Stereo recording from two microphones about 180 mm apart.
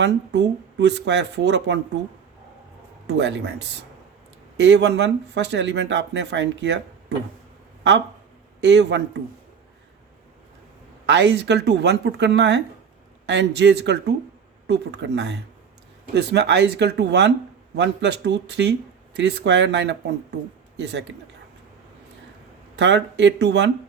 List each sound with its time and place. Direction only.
0.0 s speech: 70° right (ahead or behind)
3.1 s speech: 75° right (ahead or behind)
8.6 s speech: 75° right (ahead or behind)
11.0 s speech: 75° right (ahead or behind)
22.7 s speech: 75° right (ahead or behind)